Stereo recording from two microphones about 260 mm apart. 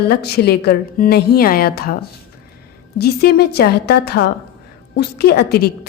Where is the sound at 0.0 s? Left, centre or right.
Left.